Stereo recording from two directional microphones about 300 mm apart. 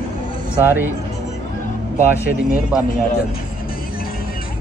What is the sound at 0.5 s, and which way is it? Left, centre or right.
Speech, centre.